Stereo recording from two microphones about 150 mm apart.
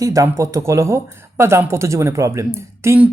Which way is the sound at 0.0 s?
20° right (ahead or behind).